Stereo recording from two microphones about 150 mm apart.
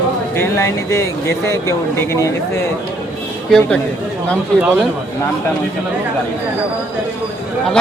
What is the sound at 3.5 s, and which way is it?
Speech, 5° left (ahead or behind).